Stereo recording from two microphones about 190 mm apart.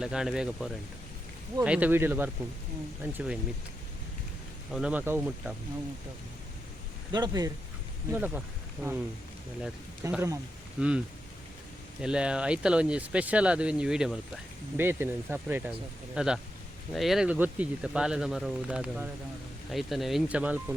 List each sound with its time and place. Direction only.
0.0 s speech: 5° right (ahead or behind)
4.7 s speech: 5° right (ahead or behind)
7.1 s speech: 20° right (ahead or behind)
8.1 s speech: 10° right (ahead or behind)
10.0 s speech: 15° right (ahead or behind)